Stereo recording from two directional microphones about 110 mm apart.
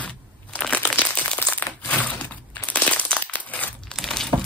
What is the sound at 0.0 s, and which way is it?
Crumpling, 10° left (ahead or behind).